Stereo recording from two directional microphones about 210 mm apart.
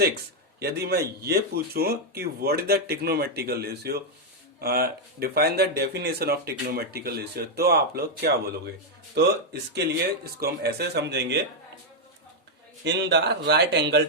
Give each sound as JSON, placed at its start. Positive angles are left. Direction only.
{"t": 0.6, "sound": "speech", "side_deg": -50}
{"t": 12.8, "sound": "speech", "side_deg": -55}